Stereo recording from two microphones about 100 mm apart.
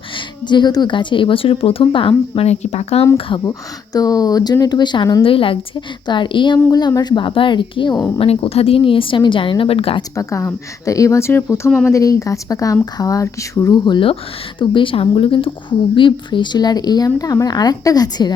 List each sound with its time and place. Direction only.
0.4 s speech: 45° left (ahead or behind); by 3.1 s 90° left
3.2 s speech: 60° left (ahead or behind)
3.9 s speech: 40° left (ahead or behind)
5.2 s speech: 65° left (ahead or behind)
6.7 s speech: 40° left (ahead or behind)
8.2 s speech: 75° left (ahead or behind)
10.2 s speech: 35° left (ahead or behind)
13.8 s speech: 55° left (ahead or behind)